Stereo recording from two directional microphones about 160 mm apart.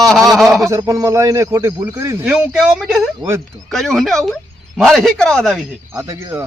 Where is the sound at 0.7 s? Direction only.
20° right (ahead or behind).